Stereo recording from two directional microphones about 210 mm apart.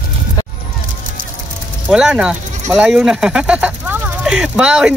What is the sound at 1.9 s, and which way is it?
Speech, 5° right (ahead or behind).